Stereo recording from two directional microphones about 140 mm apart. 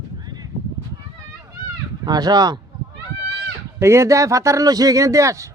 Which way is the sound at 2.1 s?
30° right (ahead or behind).